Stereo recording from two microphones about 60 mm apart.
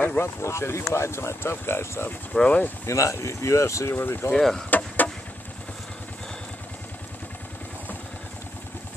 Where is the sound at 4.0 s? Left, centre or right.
Left.